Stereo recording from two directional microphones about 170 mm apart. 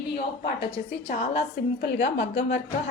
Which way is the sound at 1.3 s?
90° left.